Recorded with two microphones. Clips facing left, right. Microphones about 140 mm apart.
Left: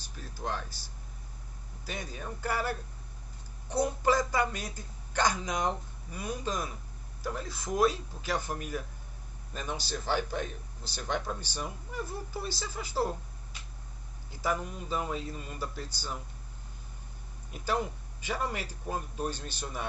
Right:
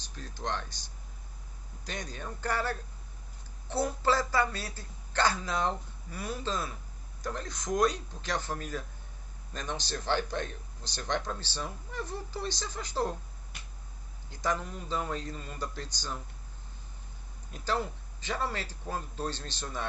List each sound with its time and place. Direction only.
0.0 s a man's voice: 10° left (ahead or behind)
14.3 s a man's voice: 10° left (ahead or behind)
17.5 s a man's voice: 10° left (ahead or behind)